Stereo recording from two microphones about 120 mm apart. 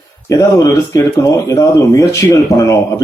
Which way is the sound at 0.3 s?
25° left (ahead or behind).